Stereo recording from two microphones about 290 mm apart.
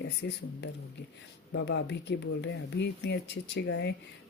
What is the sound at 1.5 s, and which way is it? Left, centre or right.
Speech, left.